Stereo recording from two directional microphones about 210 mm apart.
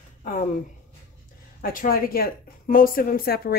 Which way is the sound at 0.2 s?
35° left (ahead or behind).